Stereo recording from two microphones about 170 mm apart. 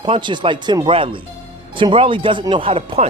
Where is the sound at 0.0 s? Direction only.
30° right (ahead or behind).